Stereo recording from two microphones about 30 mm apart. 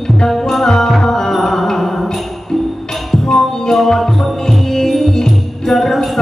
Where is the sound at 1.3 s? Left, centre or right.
Centre.